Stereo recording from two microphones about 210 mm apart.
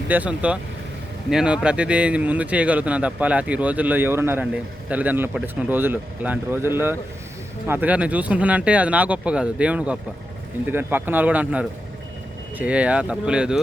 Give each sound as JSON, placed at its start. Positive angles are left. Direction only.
{"t": 0.1, "sound": "speech", "side_deg": -5}